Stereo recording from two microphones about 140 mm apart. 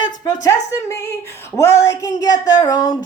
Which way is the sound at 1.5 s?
20° left (ahead or behind).